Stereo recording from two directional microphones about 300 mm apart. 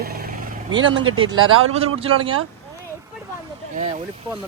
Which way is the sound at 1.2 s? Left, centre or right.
Right.